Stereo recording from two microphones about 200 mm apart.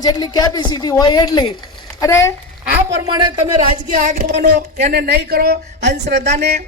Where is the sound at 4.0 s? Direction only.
40° right (ahead or behind).